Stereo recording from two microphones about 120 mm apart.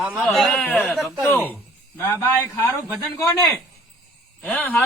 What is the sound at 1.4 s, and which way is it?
A man's voice, 15° left (ahead or behind).